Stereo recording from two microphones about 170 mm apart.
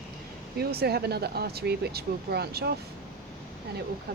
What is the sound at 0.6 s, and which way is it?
Speech, 65° right (ahead or behind).